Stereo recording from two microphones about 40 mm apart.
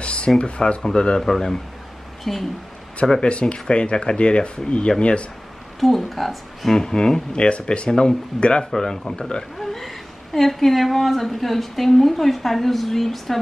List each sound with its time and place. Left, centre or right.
0.0 s a sound: left
0.4 s speech: left
2.3 s a woman's voice: centre
3.2 s speech: left
5.8 s a woman's voice: centre
6.8 s speech: centre
7.9 s speech: centre
8.4 s speech: left
9.6 s a woman's voice: centre